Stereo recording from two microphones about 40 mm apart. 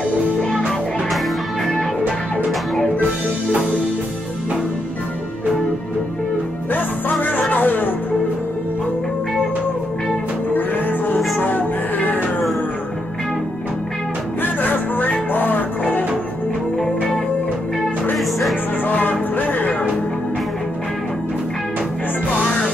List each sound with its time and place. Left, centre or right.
0.4 s music: centre
6.7 s music: left
10.5 s music: left
14.4 s music: left
18.1 s music: centre
18.9 s music: left